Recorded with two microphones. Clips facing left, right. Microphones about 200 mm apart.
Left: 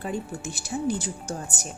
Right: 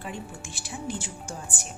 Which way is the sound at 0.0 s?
40° left (ahead or behind).